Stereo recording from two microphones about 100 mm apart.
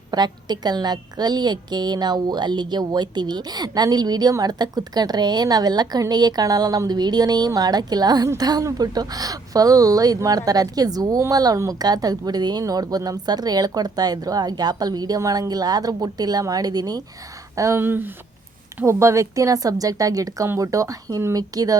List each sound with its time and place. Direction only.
0.1 s a woman's voice: 45° right (ahead or behind)
17.6 s speech: 25° right (ahead or behind)